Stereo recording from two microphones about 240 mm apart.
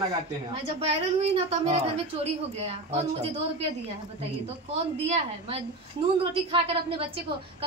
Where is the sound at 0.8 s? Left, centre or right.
Right.